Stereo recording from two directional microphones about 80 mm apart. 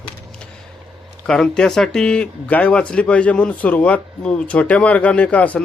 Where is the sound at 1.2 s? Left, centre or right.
Centre.